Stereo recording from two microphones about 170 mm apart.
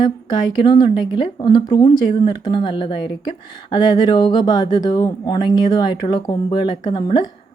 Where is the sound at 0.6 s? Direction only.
25° left (ahead or behind).